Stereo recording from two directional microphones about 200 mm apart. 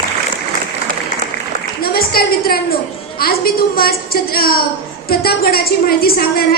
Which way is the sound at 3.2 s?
50° left (ahead or behind).